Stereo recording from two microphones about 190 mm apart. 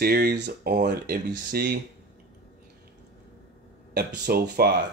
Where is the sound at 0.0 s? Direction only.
55° right (ahead or behind).